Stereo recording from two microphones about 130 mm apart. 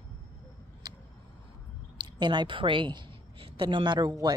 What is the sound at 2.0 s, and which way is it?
A woman's voice, 35° right (ahead or behind).